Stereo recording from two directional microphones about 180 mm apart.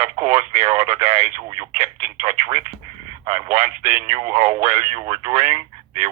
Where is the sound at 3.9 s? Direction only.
40° right (ahead or behind).